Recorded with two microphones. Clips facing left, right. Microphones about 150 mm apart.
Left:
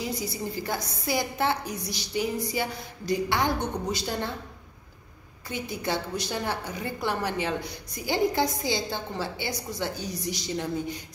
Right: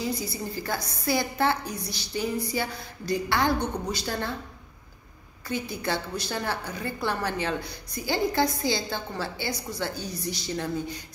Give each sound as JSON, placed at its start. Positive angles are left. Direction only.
{"t": 0.0, "sound": "a woman's voice", "side_deg": 20}
{"t": 5.5, "sound": "a woman's voice", "side_deg": 20}